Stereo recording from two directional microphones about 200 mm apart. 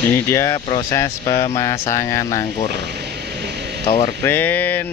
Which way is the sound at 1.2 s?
35° left (ahead or behind).